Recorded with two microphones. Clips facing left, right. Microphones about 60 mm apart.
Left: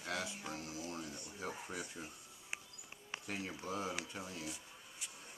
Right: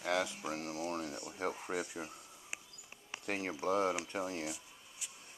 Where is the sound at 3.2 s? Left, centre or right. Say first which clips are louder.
Right 8 dB; right.